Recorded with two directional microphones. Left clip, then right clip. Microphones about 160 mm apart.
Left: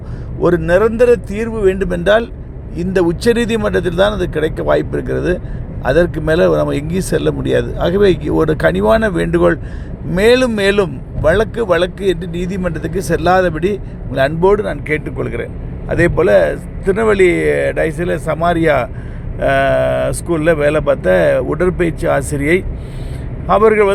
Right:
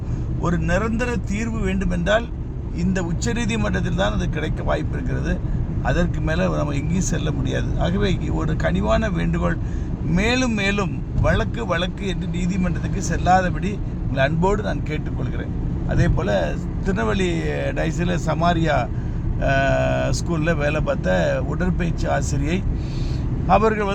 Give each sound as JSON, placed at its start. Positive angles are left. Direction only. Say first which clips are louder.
{"t": 0.7, "sound": "speech", "louder": "left 14 dB", "side_deg": 35}